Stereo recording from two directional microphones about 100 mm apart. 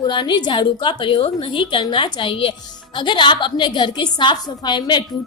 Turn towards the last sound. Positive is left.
turn(degrees=50)  # may be behind; listen again after turning